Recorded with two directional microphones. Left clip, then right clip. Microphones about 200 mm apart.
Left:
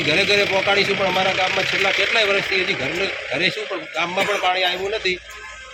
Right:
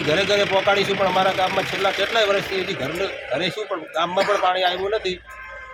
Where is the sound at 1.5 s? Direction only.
50° right (ahead or behind).